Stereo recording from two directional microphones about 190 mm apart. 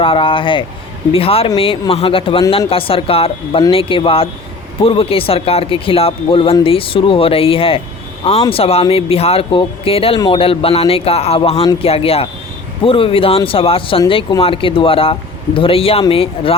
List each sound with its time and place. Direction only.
0.0 s speech: 30° left (ahead or behind)